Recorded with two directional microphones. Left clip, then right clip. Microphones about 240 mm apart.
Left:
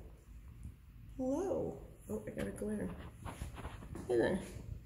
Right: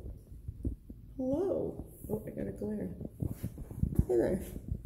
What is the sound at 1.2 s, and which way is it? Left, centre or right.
Speech, centre.